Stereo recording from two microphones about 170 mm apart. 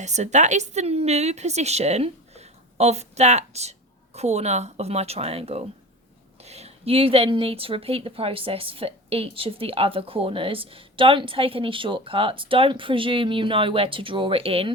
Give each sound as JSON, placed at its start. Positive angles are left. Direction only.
{"t": 0.0, "sound": "a woman's voice", "side_deg": -45}